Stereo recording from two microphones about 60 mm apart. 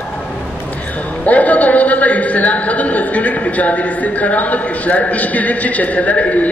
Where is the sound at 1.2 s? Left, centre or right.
Left.